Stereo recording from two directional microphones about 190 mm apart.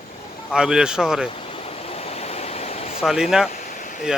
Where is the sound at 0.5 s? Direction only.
5° right (ahead or behind).